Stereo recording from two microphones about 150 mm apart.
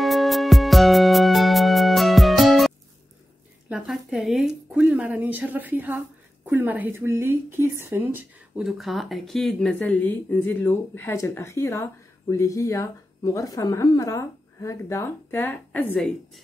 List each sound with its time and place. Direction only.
0.0 s music: centre (ahead or behind)
3.6 s speech: 5° right (ahead or behind)
8.6 s speech: centre (ahead or behind)